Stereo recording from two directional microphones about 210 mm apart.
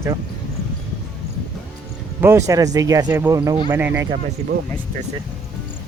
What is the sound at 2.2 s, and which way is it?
Speech, 15° right (ahead or behind).